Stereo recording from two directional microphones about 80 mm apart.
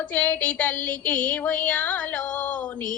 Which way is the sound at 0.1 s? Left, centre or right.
Centre.